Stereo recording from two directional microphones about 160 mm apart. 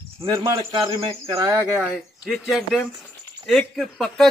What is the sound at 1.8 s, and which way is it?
Speech, centre (ahead or behind).